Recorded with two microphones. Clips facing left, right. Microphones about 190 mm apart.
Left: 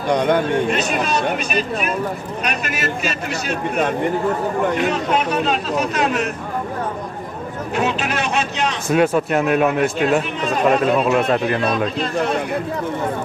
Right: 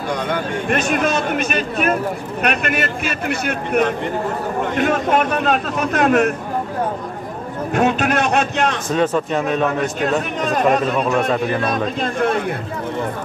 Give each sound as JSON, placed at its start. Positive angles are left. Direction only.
{"t": 0.1, "sound": "speech", "side_deg": 55}
{"t": 0.7, "sound": "speech", "side_deg": -50}
{"t": 4.7, "sound": "speech", "side_deg": -50}
{"t": 7.7, "sound": "speech", "side_deg": -50}
{"t": 8.8, "sound": "a man's voice", "side_deg": 10}
{"t": 11.6, "sound": "speech", "side_deg": -50}